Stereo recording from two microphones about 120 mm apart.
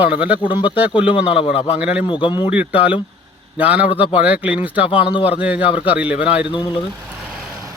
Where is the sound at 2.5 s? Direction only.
10° right (ahead or behind).